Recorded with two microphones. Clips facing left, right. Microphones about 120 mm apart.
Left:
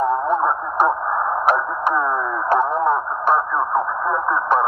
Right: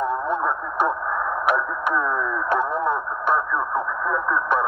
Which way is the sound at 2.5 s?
40° left (ahead or behind).